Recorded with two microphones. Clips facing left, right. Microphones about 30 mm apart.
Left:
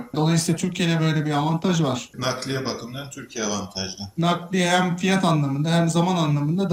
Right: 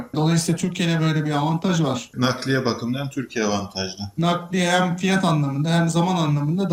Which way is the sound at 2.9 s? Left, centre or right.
Right.